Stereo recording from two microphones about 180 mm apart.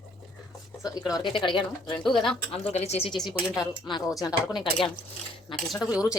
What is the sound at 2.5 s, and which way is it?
Speech, 35° left (ahead or behind).